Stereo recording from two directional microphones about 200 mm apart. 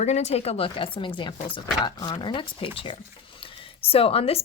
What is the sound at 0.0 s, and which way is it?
A woman's voice, 35° left (ahead or behind).